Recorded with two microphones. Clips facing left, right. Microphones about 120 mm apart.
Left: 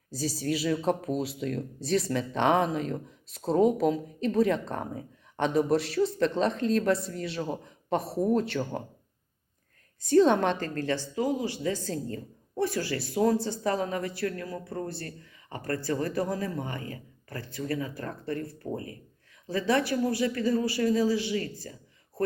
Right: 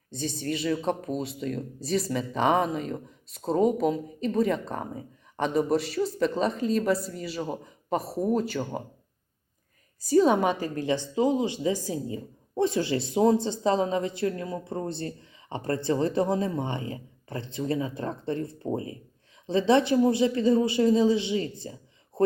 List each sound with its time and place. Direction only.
0.1 s speech: 5° left (ahead or behind)
10.0 s a woman's voice: 5° right (ahead or behind); by 22.2 s 25° right (ahead or behind)